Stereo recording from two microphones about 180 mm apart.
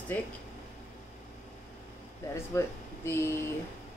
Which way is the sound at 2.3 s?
15° left (ahead or behind).